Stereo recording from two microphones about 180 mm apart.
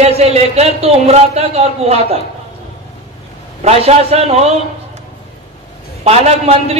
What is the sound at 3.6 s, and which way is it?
Speech, 35° right (ahead or behind).